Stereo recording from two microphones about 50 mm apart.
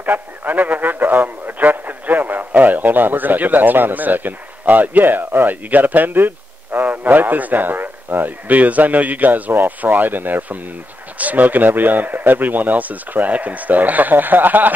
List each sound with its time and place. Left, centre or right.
0.0 s a man's voice: right